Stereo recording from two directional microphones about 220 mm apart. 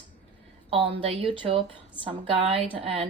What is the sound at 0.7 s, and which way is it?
Speech, 25° right (ahead or behind).